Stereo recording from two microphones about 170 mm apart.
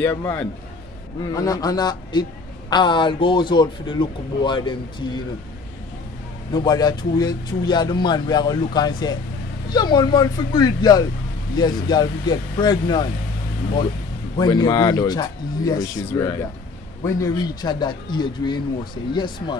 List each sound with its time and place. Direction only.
0.0 s a man's voice: 15° left (ahead or behind)
6.5 s speech: 25° left (ahead or behind)
14.3 s speech: 25° left (ahead or behind)